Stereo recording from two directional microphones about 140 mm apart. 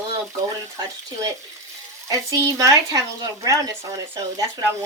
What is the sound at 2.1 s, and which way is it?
Speech, 25° right (ahead or behind).